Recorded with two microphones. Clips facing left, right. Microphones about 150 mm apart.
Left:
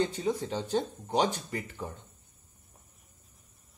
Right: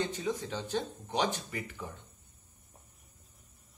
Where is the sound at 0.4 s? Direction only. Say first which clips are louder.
Left 4 dB; 35° left (ahead or behind).